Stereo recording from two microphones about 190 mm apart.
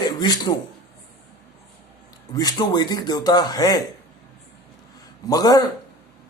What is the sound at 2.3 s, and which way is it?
Speech, 20° left (ahead or behind).